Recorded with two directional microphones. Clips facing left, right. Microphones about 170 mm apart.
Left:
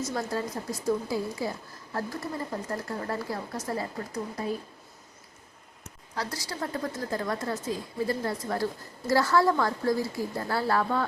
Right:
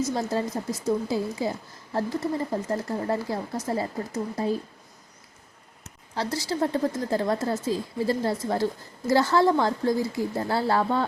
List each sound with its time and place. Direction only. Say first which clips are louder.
0.1 s speech: right 4 dB; 25° right (ahead or behind)
6.1 s speech: right 7 dB; 25° right (ahead or behind)